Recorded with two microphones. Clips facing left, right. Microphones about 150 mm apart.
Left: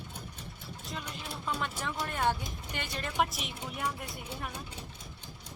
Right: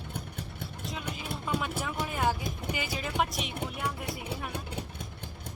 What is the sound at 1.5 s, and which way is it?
Speech, 5° right (ahead or behind).